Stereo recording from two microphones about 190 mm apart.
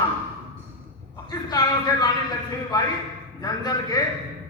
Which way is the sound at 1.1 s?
20° left (ahead or behind).